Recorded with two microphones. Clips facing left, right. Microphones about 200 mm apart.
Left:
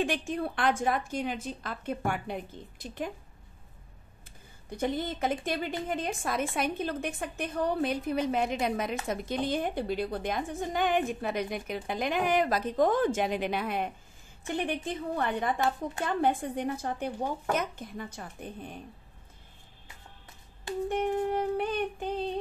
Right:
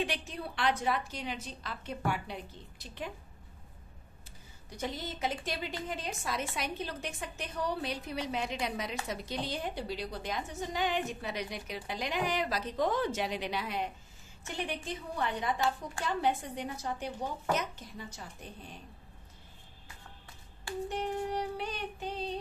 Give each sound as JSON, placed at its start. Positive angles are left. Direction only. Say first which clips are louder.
{"t": 0.0, "sound": "a woman's voice", "louder": "left 6 dB", "side_deg": 50}
{"t": 4.6, "sound": "a woman's voice", "louder": "left 7 dB", "side_deg": 55}
{"t": 20.9, "sound": "a woman's voice", "louder": "left 6 dB", "side_deg": 55}